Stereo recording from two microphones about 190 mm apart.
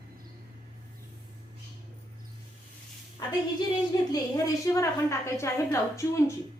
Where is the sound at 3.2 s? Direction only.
20° left (ahead or behind).